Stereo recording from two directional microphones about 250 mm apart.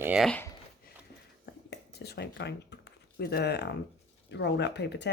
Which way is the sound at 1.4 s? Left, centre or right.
Left.